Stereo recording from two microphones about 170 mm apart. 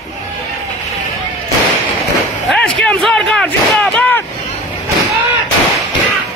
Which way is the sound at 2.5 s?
5° left (ahead or behind).